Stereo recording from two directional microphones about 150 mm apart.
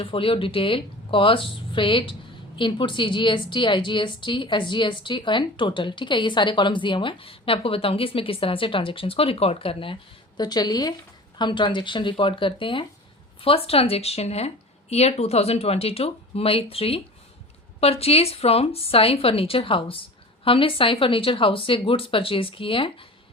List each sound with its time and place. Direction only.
0.0 s a woman's voice: 35° left (ahead or behind)